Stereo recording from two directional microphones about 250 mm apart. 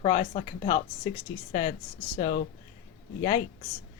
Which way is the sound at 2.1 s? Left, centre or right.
Left.